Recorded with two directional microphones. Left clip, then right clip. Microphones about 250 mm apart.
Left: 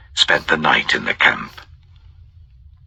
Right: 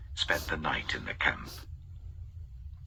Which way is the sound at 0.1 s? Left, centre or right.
Left.